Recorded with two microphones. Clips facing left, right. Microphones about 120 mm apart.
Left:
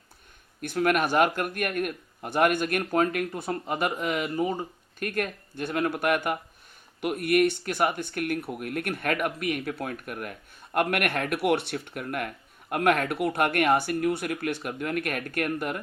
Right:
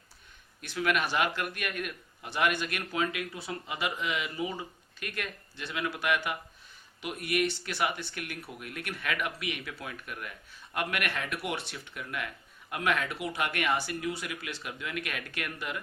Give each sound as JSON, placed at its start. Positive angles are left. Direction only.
{"t": 0.6, "sound": "speech", "side_deg": 50}